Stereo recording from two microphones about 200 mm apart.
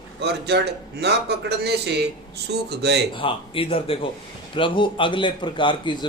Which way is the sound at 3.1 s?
25° left (ahead or behind).